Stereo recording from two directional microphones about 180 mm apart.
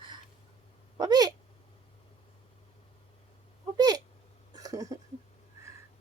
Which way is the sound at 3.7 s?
20° right (ahead or behind).